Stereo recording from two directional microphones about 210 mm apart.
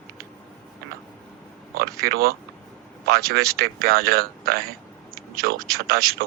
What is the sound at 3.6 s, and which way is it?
Speech, 45° right (ahead or behind).